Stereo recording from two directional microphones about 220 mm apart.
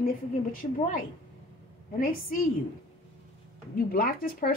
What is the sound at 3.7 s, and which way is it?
Speech, 40° left (ahead or behind).